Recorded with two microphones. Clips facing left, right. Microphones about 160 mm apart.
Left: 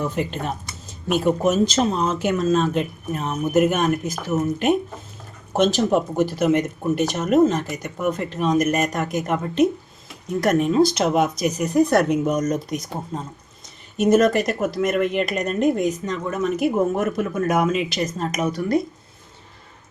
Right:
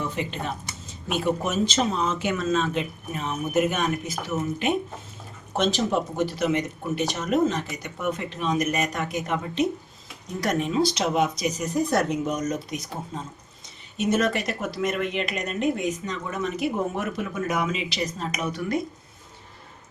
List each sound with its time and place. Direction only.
0.2 s speech: 45° left (ahead or behind)
5.5 s speech: 45° left (ahead or behind)
13.9 s speech: 45° left (ahead or behind)